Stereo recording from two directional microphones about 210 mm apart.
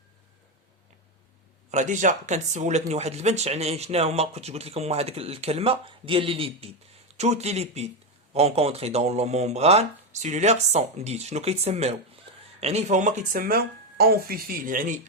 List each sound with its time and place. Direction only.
1.7 s speech: 35° right (ahead or behind)